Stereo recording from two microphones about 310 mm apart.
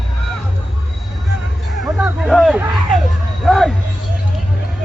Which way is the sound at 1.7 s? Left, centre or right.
Centre.